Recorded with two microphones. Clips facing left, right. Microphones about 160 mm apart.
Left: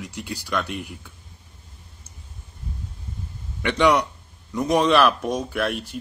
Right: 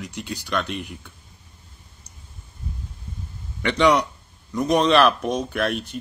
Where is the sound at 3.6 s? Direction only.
10° left (ahead or behind).